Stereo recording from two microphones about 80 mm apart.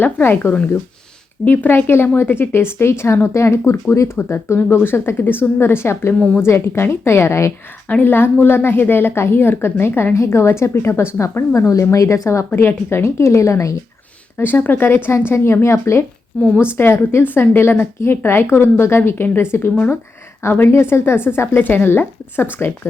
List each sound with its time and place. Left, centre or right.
0.0 s a woman's voice: left
7.9 s speech: left
14.3 s a woman's voice: left